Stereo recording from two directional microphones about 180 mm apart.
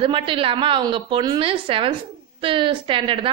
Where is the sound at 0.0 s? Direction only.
30° right (ahead or behind).